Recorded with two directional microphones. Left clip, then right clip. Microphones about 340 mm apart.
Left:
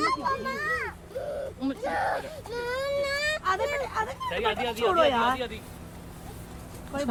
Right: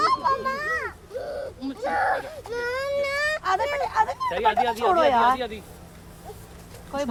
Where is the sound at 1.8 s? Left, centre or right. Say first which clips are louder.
Right 5 dB; right.